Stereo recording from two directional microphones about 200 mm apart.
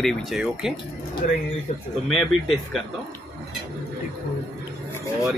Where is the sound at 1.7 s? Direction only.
35° left (ahead or behind).